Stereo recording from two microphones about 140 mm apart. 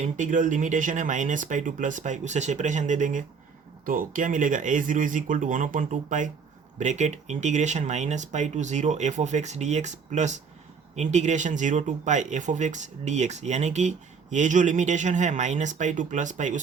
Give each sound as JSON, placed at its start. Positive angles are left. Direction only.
{"t": 0.0, "sound": "speech", "side_deg": -65}
{"t": 3.8, "sound": "speech", "side_deg": -75}